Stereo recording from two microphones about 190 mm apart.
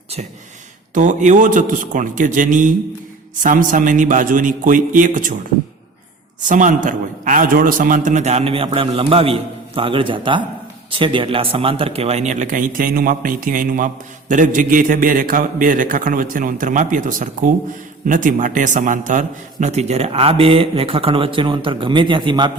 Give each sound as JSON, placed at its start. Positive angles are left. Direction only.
{"t": 0.9, "sound": "speech", "side_deg": -40}
{"t": 6.5, "sound": "a man's voice", "side_deg": -45}